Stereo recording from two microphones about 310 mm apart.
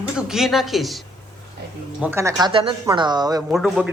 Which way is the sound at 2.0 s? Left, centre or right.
Centre.